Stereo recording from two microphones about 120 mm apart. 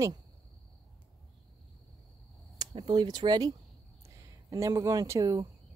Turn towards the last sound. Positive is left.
turn(degrees=-25)  # may be behind; listen again after turning